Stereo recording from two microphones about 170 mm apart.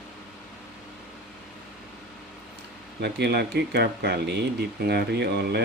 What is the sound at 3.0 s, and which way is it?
Speech, 70° right (ahead or behind).